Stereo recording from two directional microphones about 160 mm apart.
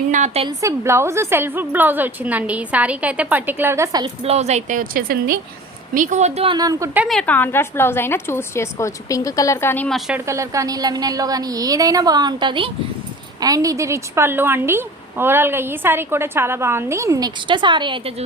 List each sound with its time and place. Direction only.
0.1 s a woman's voice: 50° right (ahead or behind)
0.4 s a woman's voice: 20° right (ahead or behind)
4.0 s a woman's voice: 40° right (ahead or behind); by 5.4 s 65° right (ahead or behind)
5.9 s a woman's voice: 55° right (ahead or behind)
6.5 s a woman's voice: 25° right (ahead or behind)
7.0 s a woman's voice: 5° left (ahead or behind)
10.2 s a woman's voice: 20° right (ahead or behind)